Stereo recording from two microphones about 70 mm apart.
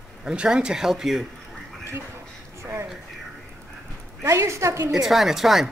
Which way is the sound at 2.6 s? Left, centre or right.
Right.